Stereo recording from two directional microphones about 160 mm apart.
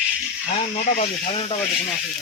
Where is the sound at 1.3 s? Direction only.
35° left (ahead or behind).